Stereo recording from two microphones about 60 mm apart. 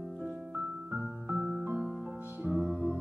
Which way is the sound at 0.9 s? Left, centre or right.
Right.